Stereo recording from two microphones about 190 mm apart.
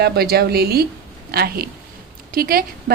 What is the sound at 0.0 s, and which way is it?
A woman's voice, 55° right (ahead or behind).